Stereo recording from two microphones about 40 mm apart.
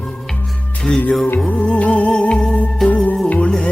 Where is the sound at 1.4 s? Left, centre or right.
Left.